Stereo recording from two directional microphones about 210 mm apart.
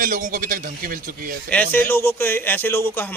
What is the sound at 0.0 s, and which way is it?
A man's voice, 40° right (ahead or behind).